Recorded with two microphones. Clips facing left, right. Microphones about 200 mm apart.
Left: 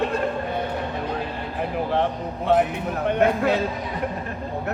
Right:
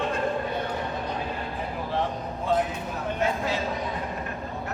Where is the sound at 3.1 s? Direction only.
60° left (ahead or behind).